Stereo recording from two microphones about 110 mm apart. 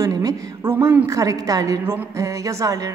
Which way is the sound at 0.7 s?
20° right (ahead or behind).